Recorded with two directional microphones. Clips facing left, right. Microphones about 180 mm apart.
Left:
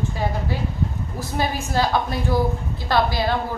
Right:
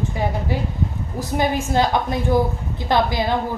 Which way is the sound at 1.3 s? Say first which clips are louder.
Right 4 dB; 20° right (ahead or behind).